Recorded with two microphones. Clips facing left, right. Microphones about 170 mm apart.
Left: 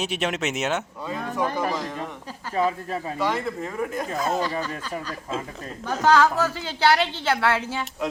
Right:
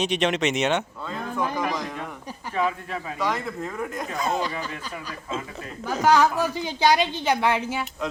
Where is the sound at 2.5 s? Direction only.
35° left (ahead or behind).